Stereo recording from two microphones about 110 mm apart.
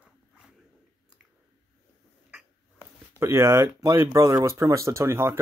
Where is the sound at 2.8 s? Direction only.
25° right (ahead or behind).